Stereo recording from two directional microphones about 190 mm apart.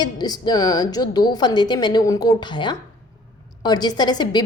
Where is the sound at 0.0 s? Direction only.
20° left (ahead or behind).